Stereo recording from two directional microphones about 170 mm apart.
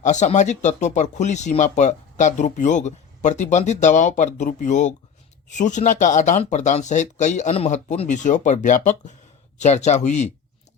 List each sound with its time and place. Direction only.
0.0 s speech: 45° left (ahead or behind)